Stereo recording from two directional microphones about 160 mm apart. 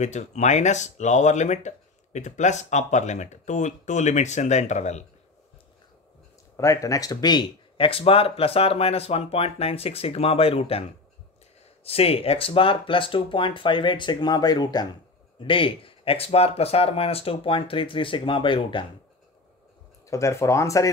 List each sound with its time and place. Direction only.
0.0 s speech: 45° left (ahead or behind)
6.5 s speech: 20° left (ahead or behind)
20.1 s speech: 20° left (ahead or behind)